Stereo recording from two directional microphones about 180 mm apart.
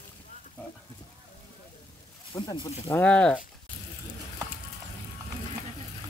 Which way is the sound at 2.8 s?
5° left (ahead or behind).